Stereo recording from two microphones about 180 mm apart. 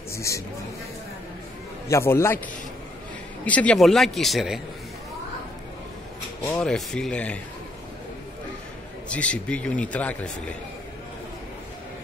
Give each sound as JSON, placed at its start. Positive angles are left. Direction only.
{"t": 0.1, "sound": "a sound", "side_deg": 15}
{"t": 1.9, "sound": "speech", "side_deg": 15}
{"t": 3.4, "sound": "a man's voice", "side_deg": 5}
{"t": 6.6, "sound": "a man's voice", "side_deg": 5}
{"t": 9.1, "sound": "speech", "side_deg": 5}